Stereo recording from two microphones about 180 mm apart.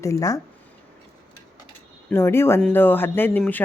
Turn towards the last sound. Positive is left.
turn(degrees=10)  # may be behind; listen again after turning